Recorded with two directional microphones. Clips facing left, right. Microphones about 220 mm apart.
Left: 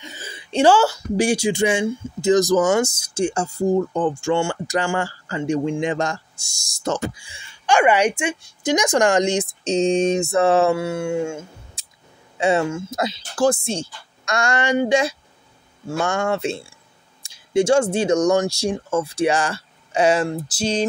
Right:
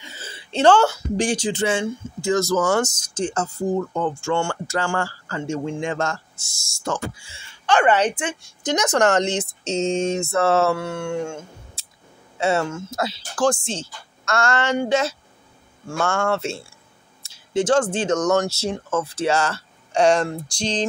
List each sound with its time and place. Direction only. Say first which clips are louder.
0.1 s throat clearing: left 4 dB; 15° left (ahead or behind)
1.1 s speech: left 3 dB; 10° left (ahead or behind)